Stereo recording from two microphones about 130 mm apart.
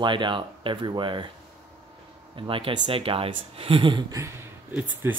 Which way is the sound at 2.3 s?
40° right (ahead or behind).